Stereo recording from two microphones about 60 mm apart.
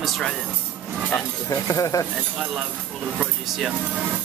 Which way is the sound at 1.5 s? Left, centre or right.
Left.